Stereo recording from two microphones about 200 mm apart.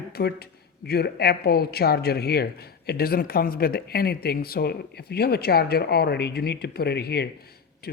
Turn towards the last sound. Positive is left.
turn(degrees=50)  # may be behind; listen again after turning